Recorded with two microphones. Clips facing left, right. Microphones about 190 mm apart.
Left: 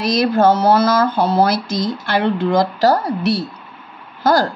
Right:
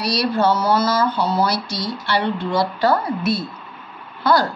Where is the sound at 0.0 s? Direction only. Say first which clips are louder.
Left 5 dB; 90° left.